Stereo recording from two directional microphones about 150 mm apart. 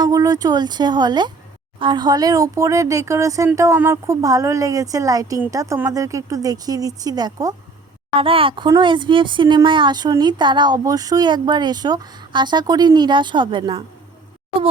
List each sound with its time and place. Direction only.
0.0 s speech: 25° right (ahead or behind)
8.1 s speech: 35° right (ahead or behind)